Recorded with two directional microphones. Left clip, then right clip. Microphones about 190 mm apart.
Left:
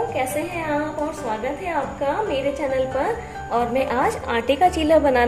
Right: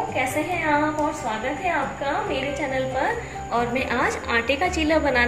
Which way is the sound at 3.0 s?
70° left (ahead or behind).